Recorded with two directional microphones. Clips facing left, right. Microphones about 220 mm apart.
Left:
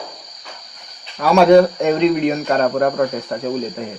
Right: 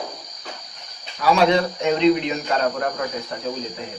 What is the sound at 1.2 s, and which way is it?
Speech, 50° left (ahead or behind).